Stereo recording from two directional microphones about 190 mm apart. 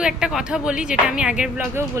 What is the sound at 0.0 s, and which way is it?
Speech, 5° right (ahead or behind).